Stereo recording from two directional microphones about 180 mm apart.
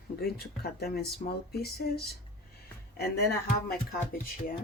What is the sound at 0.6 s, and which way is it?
Speech, 60° left (ahead or behind).